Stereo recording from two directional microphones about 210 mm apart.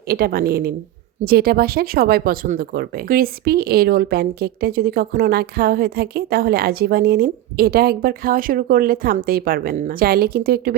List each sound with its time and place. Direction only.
0.1 s speech: 45° right (ahead or behind)